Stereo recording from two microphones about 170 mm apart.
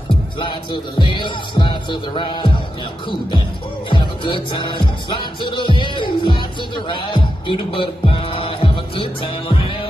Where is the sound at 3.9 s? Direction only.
30° left (ahead or behind).